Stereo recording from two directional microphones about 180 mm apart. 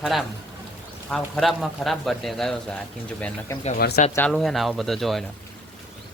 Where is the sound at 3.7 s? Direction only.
60° left (ahead or behind).